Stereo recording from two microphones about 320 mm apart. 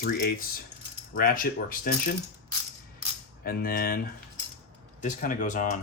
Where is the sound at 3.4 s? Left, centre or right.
Left.